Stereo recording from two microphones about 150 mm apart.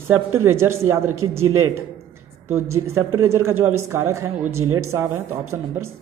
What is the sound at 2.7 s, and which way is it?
A woman's voice, 20° right (ahead or behind).